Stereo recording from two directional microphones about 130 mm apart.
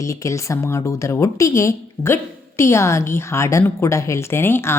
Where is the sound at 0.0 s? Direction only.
25° left (ahead or behind).